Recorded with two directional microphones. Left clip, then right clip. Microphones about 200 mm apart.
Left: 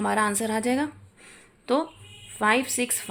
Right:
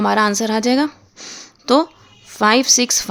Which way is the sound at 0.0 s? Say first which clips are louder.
Right 8 dB; 40° right (ahead or behind).